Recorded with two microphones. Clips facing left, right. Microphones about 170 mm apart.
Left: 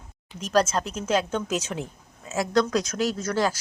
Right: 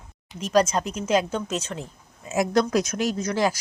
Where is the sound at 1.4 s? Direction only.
5° left (ahead or behind).